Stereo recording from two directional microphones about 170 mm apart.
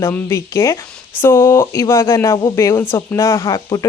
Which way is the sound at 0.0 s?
15° left (ahead or behind).